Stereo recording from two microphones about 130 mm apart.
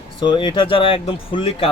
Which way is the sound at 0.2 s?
40° left (ahead or behind).